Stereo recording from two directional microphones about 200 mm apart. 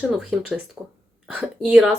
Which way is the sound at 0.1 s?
Centre (ahead or behind).